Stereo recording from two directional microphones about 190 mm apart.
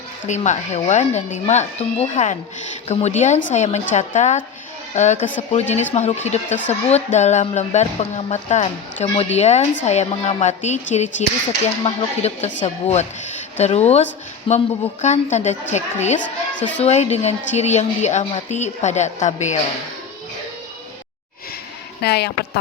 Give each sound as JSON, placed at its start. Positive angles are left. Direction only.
{"t": 0.3, "sound": "speech", "side_deg": 40}
{"t": 22.0, "sound": "speech", "side_deg": 60}